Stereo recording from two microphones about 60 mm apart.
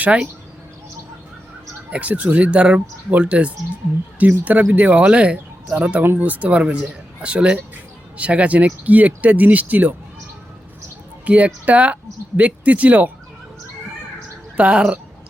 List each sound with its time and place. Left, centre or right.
0.0 s speech: right
1.9 s speech: right
6.0 s speech: right
11.3 s speech: right
14.5 s speech: centre